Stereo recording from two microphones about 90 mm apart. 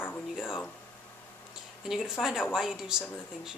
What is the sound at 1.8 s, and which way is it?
A woman's voice, 5° right (ahead or behind).